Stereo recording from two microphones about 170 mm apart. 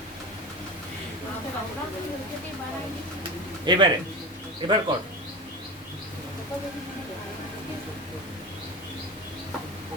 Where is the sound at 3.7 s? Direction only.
25° right (ahead or behind).